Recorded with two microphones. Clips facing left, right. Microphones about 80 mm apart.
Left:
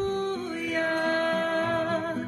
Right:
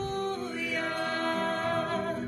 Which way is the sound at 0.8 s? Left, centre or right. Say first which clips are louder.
Left 7 dB; left.